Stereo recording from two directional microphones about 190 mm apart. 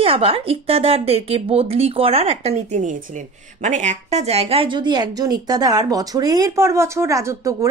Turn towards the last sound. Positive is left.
turn(degrees=-15)  # may be behind; listen again after turning